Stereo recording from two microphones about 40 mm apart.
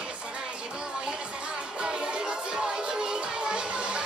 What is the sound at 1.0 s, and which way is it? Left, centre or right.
Music, right.